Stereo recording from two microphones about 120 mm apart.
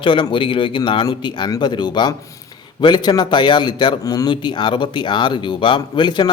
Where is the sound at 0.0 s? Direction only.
45° left (ahead or behind).